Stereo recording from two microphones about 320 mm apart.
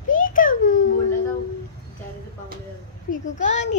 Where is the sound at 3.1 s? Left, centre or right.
Left.